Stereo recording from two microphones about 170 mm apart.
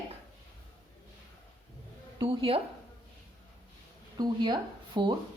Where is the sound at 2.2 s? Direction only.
35° right (ahead or behind).